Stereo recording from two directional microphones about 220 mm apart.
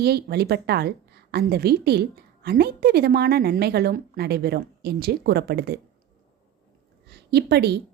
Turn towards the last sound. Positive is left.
turn(degrees=-50)  # may be behind; listen again after turning